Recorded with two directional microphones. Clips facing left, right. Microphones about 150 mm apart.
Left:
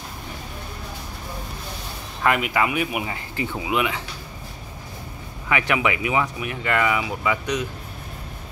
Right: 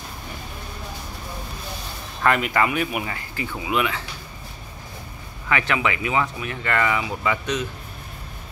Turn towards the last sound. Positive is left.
turn(degrees=10)  # may be behind; listen again after turning